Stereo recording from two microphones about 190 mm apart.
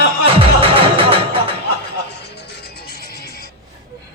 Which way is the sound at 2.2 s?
60° left (ahead or behind).